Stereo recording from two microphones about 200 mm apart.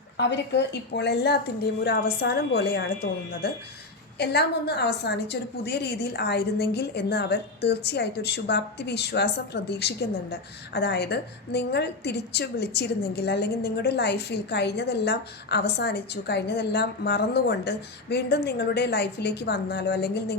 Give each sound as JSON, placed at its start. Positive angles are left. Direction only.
{"t": 0.2, "sound": "a woman's voice", "side_deg": 60}